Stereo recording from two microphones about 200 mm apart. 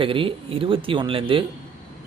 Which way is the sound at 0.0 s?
25° right (ahead or behind).